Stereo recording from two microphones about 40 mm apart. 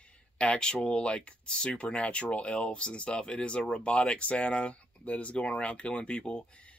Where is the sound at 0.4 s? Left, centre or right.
Left.